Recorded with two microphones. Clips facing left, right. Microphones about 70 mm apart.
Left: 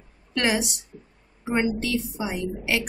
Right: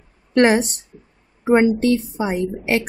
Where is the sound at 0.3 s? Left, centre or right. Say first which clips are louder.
Right 9 dB; right.